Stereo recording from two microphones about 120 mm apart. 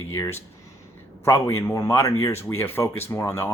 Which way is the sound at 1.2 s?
25° left (ahead or behind).